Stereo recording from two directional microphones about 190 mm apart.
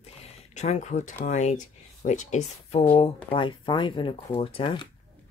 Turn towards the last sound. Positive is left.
turn(degrees=25)  # may be behind; listen again after turning